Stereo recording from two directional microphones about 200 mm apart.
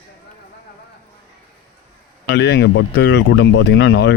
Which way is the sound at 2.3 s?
60° left (ahead or behind).